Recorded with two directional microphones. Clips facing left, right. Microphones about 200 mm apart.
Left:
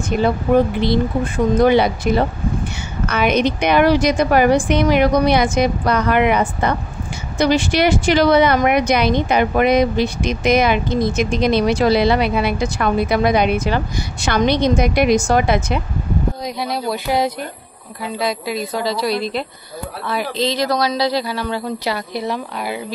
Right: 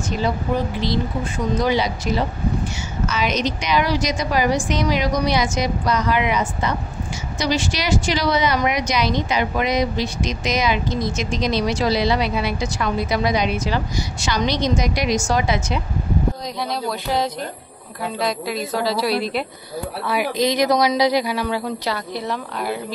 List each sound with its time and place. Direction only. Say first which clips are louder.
0.1 s a woman's voice: left 7 dB; 55° left (ahead or behind)
16.6 s a woman's voice: left 3 dB; 10° left (ahead or behind); by 21.6 s 10° right (ahead or behind)
21.8 s a woman's voice: left 3 dB; 10° left (ahead or behind)